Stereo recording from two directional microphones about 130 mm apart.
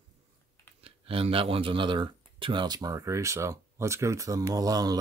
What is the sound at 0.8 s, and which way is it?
Speech, 45° right (ahead or behind).